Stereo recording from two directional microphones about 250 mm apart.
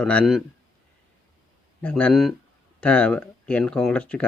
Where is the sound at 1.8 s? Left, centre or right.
Centre.